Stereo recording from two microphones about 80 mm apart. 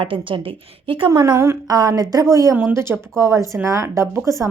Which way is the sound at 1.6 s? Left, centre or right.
Right.